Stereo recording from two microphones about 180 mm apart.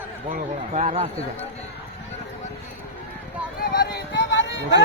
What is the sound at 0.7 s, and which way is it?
Speech, 40° right (ahead or behind).